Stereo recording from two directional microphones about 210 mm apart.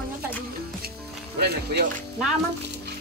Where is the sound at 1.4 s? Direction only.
50° right (ahead or behind).